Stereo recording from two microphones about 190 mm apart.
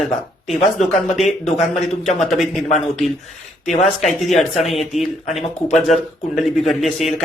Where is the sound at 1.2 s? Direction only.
Centre (ahead or behind).